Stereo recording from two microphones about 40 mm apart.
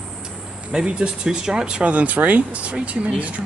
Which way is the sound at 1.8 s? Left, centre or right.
Right.